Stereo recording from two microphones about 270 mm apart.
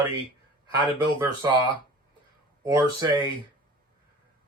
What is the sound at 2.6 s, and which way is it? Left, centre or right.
Speech, centre.